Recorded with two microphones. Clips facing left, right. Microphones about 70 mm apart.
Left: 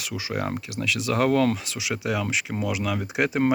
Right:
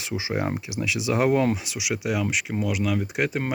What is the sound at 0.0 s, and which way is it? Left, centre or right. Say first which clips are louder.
Speech: right 2 dB; right.